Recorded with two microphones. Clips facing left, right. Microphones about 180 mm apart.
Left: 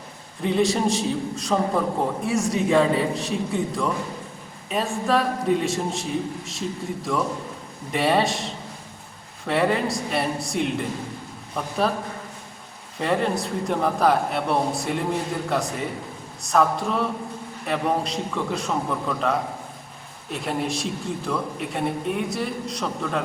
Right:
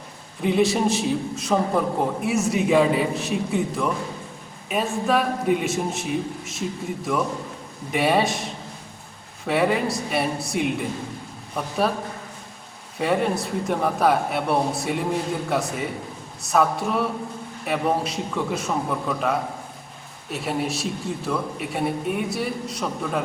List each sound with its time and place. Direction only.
0.4 s a man's voice: 5° right (ahead or behind)
9.5 s a man's voice: 5° right (ahead or behind)
13.0 s a man's voice: 5° right (ahead or behind)